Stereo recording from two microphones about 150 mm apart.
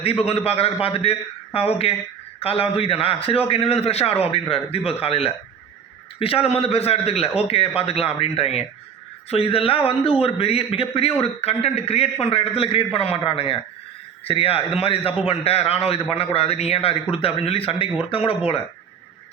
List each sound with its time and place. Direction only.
0.0 s a man's voice: 40° left (ahead or behind)